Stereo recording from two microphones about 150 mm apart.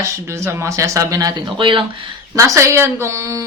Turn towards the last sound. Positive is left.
turn(degrees=-20)  # may be behind; listen again after turning